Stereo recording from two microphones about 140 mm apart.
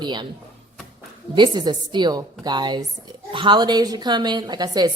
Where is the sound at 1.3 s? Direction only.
30° right (ahead or behind).